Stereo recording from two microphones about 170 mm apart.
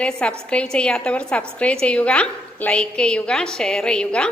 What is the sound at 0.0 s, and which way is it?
A woman's voice, 5° left (ahead or behind).